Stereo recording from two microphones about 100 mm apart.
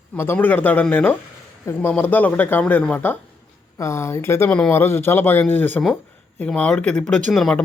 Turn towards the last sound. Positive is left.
turn(degrees=5)  # may be behind; listen again after turning